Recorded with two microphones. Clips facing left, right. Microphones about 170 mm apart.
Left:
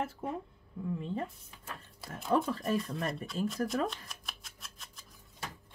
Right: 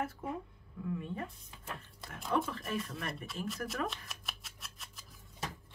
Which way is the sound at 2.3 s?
35° left (ahead or behind).